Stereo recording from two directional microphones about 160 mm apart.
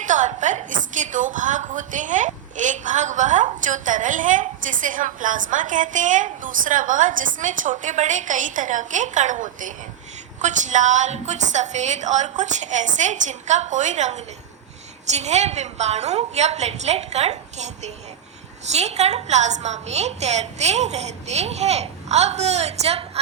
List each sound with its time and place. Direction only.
0.0 s a woman's voice: 50° right (ahead or behind)